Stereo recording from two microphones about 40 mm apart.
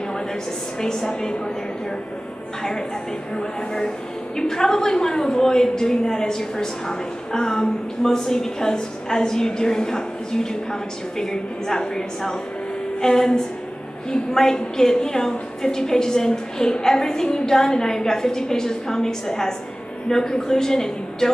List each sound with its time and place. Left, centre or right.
0.7 s a woman's voice: centre
3.3 s a woman's voice: centre